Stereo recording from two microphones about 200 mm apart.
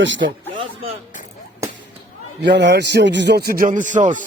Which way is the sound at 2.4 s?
60° right (ahead or behind).